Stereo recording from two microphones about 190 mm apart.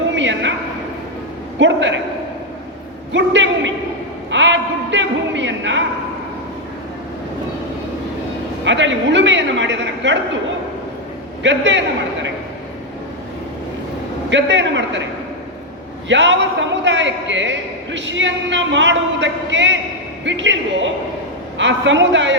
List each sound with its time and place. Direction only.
0.2 s a sound: 75° right (ahead or behind)
1.5 s a man's voice: 75° right (ahead or behind)
3.1 s a man's voice: 75° right (ahead or behind)
4.3 s a sound: 75° right (ahead or behind)
8.6 s a man's voice: 75° right (ahead or behind)
11.4 s a man's voice: 70° right (ahead or behind)
14.3 s a man's voice: 70° right (ahead or behind)
16.0 s a man's voice: 75° right (ahead or behind)